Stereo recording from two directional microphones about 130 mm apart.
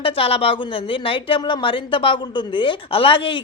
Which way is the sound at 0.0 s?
50° left (ahead or behind).